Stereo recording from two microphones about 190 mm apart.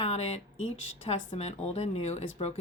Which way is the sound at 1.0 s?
35° left (ahead or behind).